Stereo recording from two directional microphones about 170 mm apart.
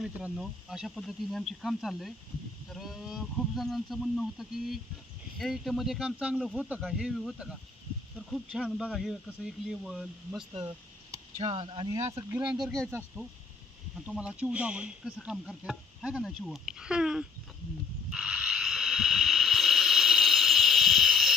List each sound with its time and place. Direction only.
0.0 s speech: 5° right (ahead or behind)
10.5 s a sound: 25° right (ahead or behind)
11.3 s speech: 30° right (ahead or behind)
12.5 s speech: 5° right (ahead or behind)
13.9 s speech: 5° right (ahead or behind)
18.1 s a sound: 5° right (ahead or behind)